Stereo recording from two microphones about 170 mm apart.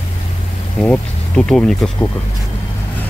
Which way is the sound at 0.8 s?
5° left (ahead or behind).